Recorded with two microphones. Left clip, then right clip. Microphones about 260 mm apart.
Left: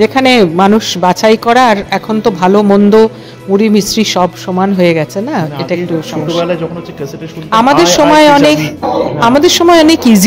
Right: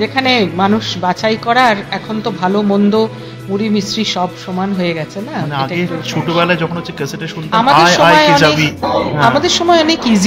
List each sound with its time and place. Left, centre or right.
0.0 s speech: left
6.4 s speech: centre
7.5 s speech: left